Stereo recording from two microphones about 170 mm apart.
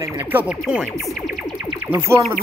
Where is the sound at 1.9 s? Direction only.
15° right (ahead or behind).